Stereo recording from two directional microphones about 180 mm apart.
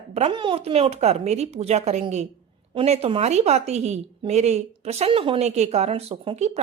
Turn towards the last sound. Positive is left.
turn(degrees=-35)  # may be behind; listen again after turning